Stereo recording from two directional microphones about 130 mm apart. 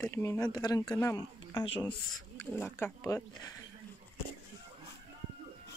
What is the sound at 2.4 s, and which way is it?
Speech, 15° left (ahead or behind).